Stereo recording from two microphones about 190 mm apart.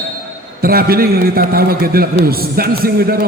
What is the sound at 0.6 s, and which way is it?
A man's voice, 50° right (ahead or behind).